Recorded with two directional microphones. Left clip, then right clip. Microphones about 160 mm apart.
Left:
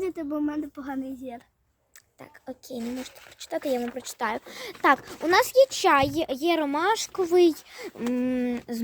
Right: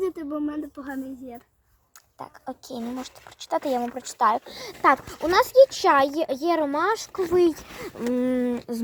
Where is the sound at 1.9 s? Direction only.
Centre (ahead or behind).